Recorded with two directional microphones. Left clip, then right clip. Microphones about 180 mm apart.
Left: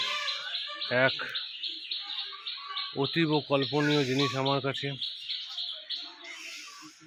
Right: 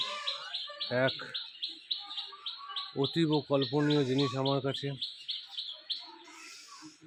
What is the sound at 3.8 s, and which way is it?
Speech, centre (ahead or behind).